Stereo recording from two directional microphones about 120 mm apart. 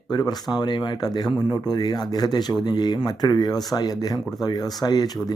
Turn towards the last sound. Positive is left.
turn(degrees=30)  # may be behind; listen again after turning